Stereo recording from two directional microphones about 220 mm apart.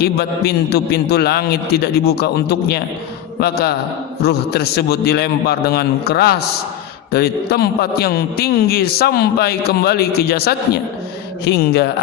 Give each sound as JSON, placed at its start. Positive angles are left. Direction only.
{"t": 0.0, "sound": "a man's voice", "side_deg": 45}